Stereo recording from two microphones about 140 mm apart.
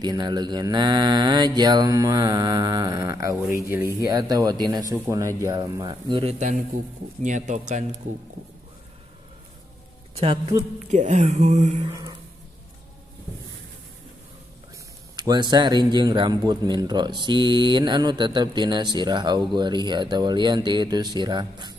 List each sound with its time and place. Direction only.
0.0 s mantra: 30° right (ahead or behind)
7.2 s speech: 60° right (ahead or behind)
10.1 s a woman's voice: 45° right (ahead or behind)
10.9 s speech: 55° right (ahead or behind)
11.9 s a sound: 30° right (ahead or behind)
15.1 s speech: 30° right (ahead or behind)